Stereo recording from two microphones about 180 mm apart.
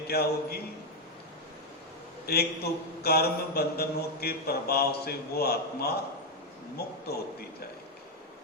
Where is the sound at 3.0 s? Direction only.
60° left (ahead or behind).